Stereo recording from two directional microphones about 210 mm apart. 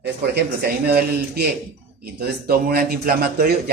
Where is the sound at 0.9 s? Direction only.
50° right (ahead or behind).